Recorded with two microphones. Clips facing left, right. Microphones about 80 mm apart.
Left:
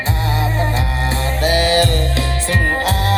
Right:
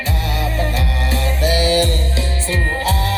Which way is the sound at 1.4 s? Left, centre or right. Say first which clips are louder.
Left 1 dB; left.